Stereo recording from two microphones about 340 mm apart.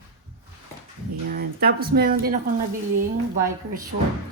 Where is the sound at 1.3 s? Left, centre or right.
Right.